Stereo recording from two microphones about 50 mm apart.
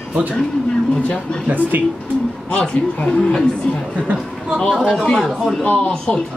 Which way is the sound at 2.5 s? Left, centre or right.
Left.